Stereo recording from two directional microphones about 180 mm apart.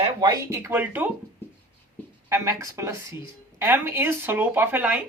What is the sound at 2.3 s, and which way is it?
Speech, 15° right (ahead or behind).